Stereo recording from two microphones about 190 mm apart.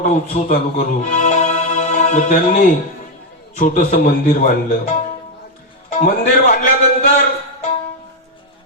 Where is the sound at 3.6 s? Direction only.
45° left (ahead or behind).